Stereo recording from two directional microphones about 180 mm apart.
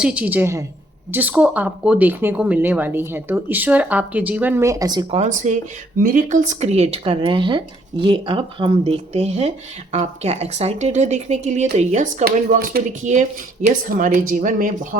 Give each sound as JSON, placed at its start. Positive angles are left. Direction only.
{"t": 0.0, "sound": "speech", "side_deg": -5}
{"t": 5.2, "sound": "speech", "side_deg": -45}